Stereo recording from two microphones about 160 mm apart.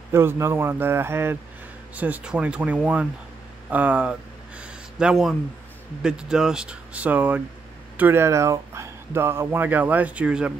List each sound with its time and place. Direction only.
0.1 s speech: 15° right (ahead or behind)
3.7 s a sound: 10° right (ahead or behind)
6.0 s speech: 5° right (ahead or behind)